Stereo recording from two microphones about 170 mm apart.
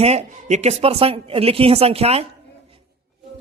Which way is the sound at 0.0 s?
40° right (ahead or behind).